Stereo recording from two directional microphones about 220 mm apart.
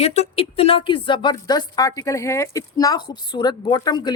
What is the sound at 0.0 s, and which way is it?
Speech, 30° left (ahead or behind).